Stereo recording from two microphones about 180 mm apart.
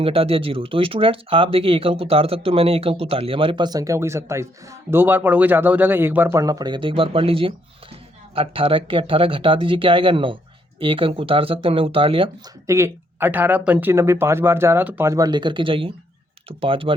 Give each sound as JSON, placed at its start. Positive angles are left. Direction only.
{"t": 0.0, "sound": "speech", "side_deg": -30}
{"t": 12.6, "sound": "speech", "side_deg": -15}